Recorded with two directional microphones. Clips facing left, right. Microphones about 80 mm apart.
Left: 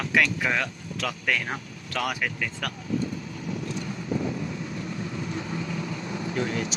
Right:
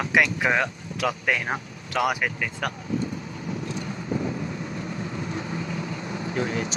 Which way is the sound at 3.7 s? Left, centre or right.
Right.